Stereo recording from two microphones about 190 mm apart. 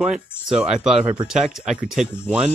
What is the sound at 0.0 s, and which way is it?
Speech, centre (ahead or behind).